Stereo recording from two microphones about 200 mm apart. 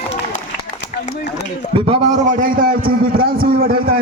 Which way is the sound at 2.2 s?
45° right (ahead or behind).